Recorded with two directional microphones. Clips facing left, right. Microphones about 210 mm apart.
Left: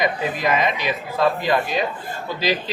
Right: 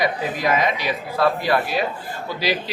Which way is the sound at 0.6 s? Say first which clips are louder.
Even; 10° right (ahead or behind).